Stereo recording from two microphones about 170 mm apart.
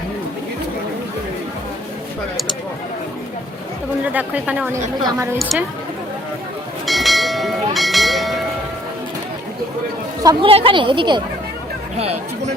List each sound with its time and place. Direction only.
4.0 s a woman's voice: 10° right (ahead or behind)
5.4 s a woman's voice: centre (ahead or behind)
6.8 s a sound: centre (ahead or behind)
10.4 s a woman's voice: 35° right (ahead or behind)